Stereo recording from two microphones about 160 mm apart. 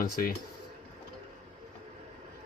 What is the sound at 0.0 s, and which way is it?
Speech, 65° left (ahead or behind).